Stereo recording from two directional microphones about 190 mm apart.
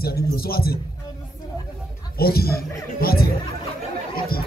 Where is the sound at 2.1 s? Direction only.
55° left (ahead or behind).